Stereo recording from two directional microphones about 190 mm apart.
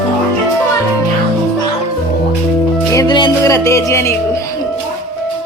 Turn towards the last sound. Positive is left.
turn(degrees=15)  # may be behind; listen again after turning